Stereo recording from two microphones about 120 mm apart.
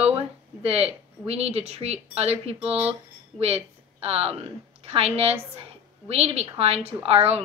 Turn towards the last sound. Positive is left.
turn(degrees=-55)  # may be behind; listen again after turning